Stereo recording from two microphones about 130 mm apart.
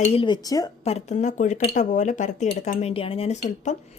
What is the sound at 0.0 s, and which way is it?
Speech, 50° left (ahead or behind).